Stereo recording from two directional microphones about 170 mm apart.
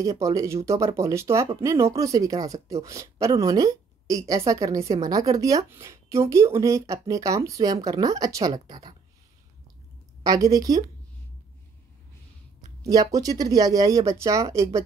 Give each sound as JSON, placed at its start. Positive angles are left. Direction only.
{"t": 0.0, "sound": "speech", "side_deg": -20}
{"t": 10.2, "sound": "speech", "side_deg": -20}
{"t": 12.9, "sound": "speech", "side_deg": -20}